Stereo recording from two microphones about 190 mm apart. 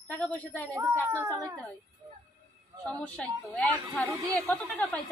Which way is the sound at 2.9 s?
5° left (ahead or behind).